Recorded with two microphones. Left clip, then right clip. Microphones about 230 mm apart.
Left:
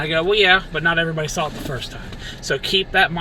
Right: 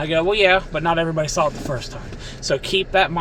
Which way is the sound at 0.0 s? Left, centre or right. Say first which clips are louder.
Even; centre.